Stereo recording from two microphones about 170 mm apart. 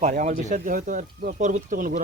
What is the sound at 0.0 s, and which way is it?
Speech, 45° right (ahead or behind).